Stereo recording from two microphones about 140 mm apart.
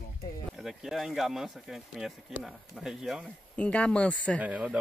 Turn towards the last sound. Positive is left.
turn(degrees=-10)  # may be behind; listen again after turning